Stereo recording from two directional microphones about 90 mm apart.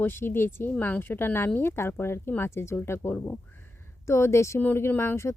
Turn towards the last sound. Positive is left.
turn(degrees=30)  # may be behind; listen again after turning